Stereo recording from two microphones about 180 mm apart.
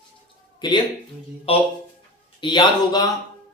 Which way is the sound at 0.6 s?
25° left (ahead or behind).